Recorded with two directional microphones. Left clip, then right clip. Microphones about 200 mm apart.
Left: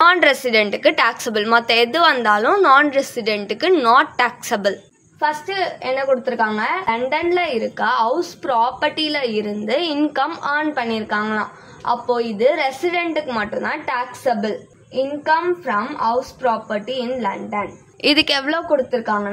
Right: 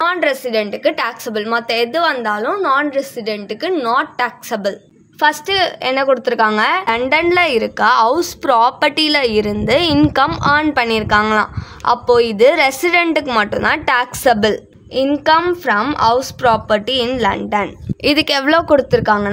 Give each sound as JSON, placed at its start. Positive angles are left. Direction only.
{"t": 0.0, "sound": "a woman's voice", "side_deg": -20}
{"t": 5.2, "sound": "a woman's voice", "side_deg": -55}
{"t": 15.0, "sound": "a woman's voice", "side_deg": -65}
{"t": 18.0, "sound": "a woman's voice", "side_deg": -30}
{"t": 18.5, "sound": "a woman's voice", "side_deg": -55}